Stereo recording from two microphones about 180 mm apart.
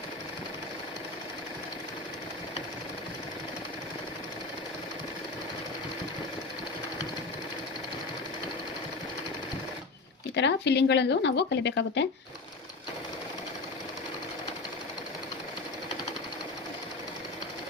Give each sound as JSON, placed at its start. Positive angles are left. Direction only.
{"t": 10.3, "sound": "speech", "side_deg": 75}